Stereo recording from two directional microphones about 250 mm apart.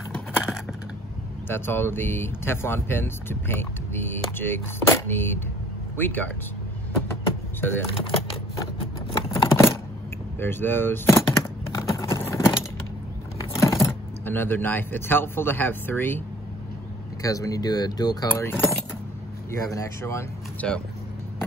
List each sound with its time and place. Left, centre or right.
0.1 s a sound: centre
1.5 s speech: centre
7.2 s music: centre
7.9 s typewriter: left
9.1 s a sound: centre
10.4 s speech: centre
11.7 s clip-clop: centre
13.6 s speech: centre
17.2 s speech: centre